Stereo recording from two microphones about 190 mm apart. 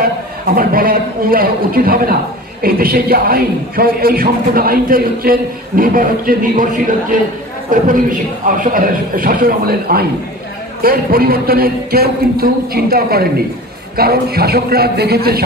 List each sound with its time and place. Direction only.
0.6 s speech: 50° right (ahead or behind)